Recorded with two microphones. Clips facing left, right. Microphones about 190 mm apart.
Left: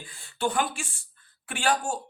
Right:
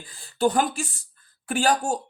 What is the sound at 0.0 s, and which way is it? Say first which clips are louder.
Speech: right 7 dB; 35° right (ahead or behind).